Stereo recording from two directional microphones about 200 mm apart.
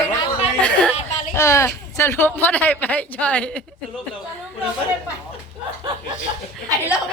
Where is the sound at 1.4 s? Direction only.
15° left (ahead or behind).